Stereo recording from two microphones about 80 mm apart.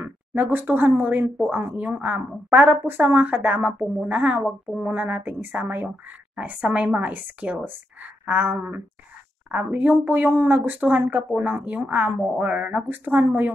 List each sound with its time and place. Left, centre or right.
0.0 s speech: right